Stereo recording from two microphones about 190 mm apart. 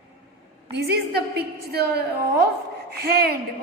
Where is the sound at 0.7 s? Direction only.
60° right (ahead or behind).